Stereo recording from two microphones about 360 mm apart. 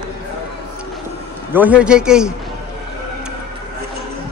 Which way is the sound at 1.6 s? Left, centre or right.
Centre.